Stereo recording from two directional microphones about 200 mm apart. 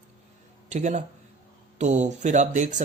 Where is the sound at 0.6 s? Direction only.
35° right (ahead or behind).